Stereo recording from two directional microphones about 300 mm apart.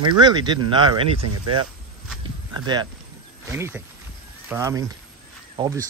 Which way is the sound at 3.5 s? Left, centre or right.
Centre.